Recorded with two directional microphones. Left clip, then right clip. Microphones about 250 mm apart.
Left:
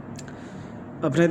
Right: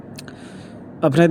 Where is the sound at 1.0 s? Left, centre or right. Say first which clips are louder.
Right 6 dB; right.